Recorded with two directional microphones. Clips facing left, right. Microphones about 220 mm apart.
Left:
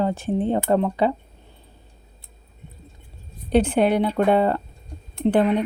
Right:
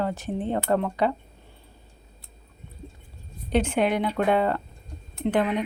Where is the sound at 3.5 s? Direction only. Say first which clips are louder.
Left 5 dB; 35° left (ahead or behind).